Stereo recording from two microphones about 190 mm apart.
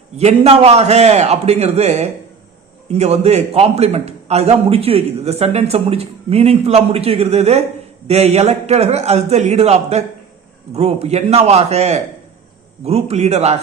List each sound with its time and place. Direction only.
0.4 s a man's voice: 35° right (ahead or behind)